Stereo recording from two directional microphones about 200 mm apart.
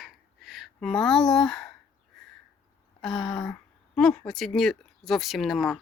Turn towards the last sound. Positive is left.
turn(degrees=0)  # may be behind; listen again after turning